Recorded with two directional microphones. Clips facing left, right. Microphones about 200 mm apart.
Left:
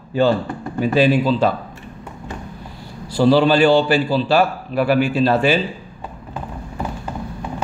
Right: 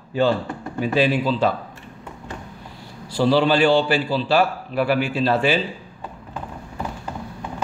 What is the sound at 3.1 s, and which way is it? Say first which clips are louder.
A man's voice: left 4 dB; 40° left (ahead or behind).